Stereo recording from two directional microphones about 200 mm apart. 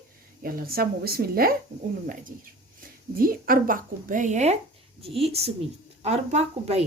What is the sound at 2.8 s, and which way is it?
A woman's voice, 45° right (ahead or behind).